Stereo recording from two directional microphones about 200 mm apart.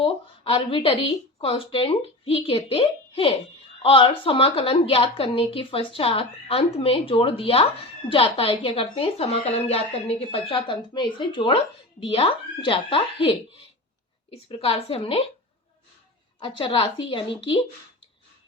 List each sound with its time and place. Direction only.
0.0 s a woman's voice: 25° left (ahead or behind)
16.4 s a woman's voice: 25° left (ahead or behind)